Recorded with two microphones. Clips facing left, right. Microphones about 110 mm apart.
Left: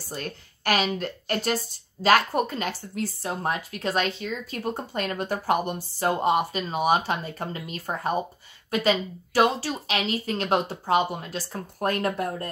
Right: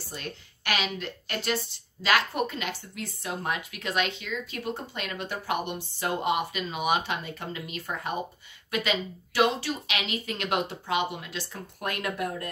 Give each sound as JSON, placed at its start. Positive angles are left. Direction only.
{"t": 0.1, "sound": "a woman's voice", "side_deg": 40}